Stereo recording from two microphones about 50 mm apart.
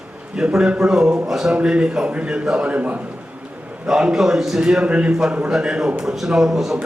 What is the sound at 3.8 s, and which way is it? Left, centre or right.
A man's voice, centre.